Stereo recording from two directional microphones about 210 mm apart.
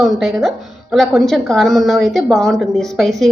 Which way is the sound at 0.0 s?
Centre (ahead or behind).